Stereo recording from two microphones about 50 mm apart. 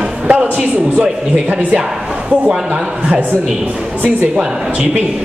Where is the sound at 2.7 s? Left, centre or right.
Right.